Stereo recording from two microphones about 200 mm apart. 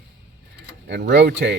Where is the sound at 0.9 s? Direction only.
60° right (ahead or behind).